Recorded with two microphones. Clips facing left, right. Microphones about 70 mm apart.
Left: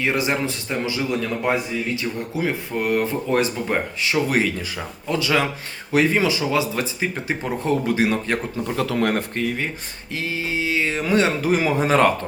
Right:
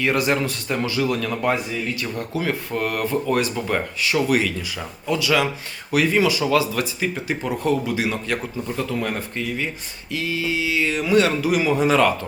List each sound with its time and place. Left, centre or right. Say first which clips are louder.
0.0 s speech: right 1 dB; left
8.6 s speech: left 3 dB; left
9.0 s speech: left 4 dB; left
10.1 s speech: right 2 dB; left